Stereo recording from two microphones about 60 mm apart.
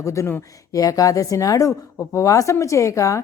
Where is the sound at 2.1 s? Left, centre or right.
Left.